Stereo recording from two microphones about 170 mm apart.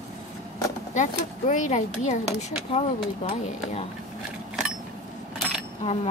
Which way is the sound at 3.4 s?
40° left (ahead or behind).